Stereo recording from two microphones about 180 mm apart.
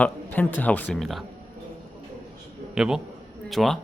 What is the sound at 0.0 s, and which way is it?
Speech, 10° left (ahead or behind).